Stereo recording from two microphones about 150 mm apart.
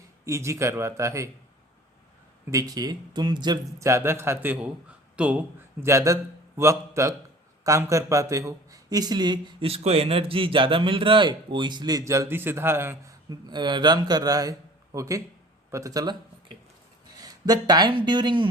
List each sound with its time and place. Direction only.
0.3 s speech: 20° right (ahead or behind)
2.5 s speech: 25° right (ahead or behind)
3.8 s a man's voice: 20° right (ahead or behind)
17.2 s speech: 25° right (ahead or behind)